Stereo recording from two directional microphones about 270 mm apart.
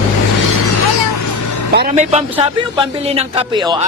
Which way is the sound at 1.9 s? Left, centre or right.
Right.